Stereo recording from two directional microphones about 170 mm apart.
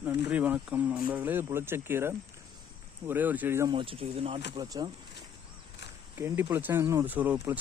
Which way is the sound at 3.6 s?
30° right (ahead or behind).